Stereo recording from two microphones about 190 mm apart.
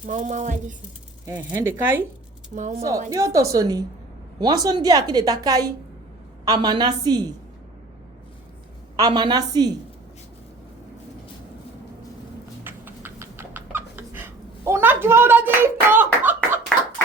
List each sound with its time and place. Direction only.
0.0 s speech: 40° right (ahead or behind)
1.2 s a woman's voice: 10° right (ahead or behind)
2.6 s speech: 40° right (ahead or behind)
3.1 s a woman's voice: 15° right (ahead or behind)
9.0 s a woman's voice: 20° right (ahead or behind)
12.6 s cat: 10° right (ahead or behind)